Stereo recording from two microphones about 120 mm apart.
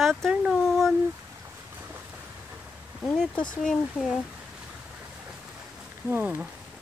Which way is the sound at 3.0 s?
5° left (ahead or behind).